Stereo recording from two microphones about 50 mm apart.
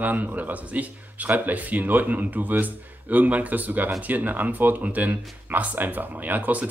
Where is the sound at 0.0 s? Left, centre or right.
Right.